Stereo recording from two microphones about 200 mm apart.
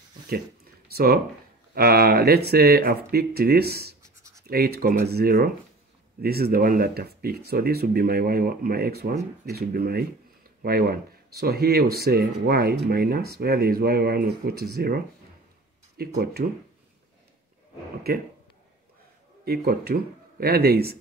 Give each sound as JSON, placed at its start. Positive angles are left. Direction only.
{"t": 0.9, "sound": "speech", "side_deg": -50}
{"t": 19.4, "sound": "speech", "side_deg": -50}